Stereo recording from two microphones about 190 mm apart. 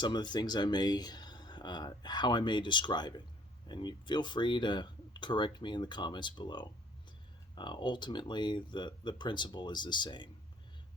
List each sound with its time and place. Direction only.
0.0 s speech: 25° left (ahead or behind)